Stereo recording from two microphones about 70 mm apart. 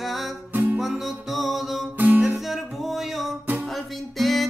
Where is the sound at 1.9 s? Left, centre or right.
Right.